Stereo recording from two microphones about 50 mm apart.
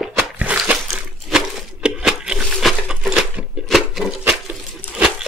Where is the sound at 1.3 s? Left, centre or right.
Centre.